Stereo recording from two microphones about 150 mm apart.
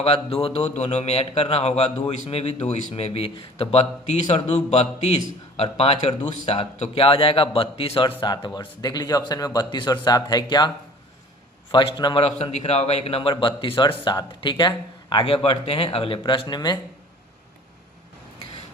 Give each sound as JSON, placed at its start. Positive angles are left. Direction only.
{"t": 0.0, "sound": "a man's voice", "side_deg": 40}
{"t": 11.7, "sound": "a man's voice", "side_deg": 35}